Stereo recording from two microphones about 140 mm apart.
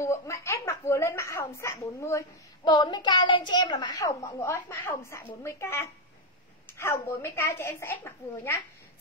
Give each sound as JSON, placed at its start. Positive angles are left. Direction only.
{"t": 0.0, "sound": "a woman's voice", "side_deg": 20}
{"t": 4.4, "sound": "a woman's voice", "side_deg": 20}